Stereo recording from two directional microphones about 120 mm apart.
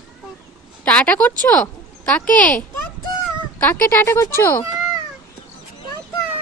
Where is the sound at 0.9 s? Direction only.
10° left (ahead or behind).